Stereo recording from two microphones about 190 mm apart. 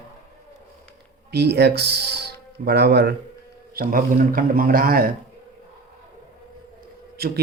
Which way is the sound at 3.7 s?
45° right (ahead or behind).